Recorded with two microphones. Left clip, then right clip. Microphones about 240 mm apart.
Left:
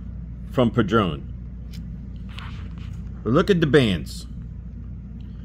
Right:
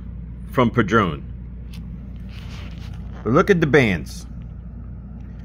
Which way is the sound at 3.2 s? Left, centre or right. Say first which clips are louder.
Right 3 dB; centre.